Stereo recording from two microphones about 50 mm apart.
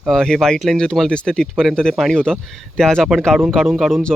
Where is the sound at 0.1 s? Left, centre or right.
Centre.